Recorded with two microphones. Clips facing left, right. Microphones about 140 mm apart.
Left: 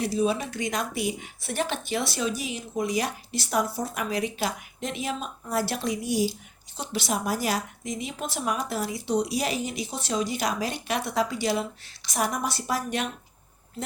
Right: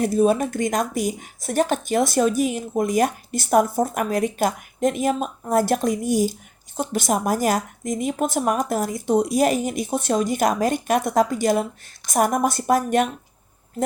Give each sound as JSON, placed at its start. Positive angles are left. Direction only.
{"t": 0.0, "sound": "speech", "side_deg": -50}